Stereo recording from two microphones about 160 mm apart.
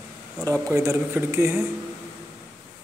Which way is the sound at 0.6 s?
20° right (ahead or behind).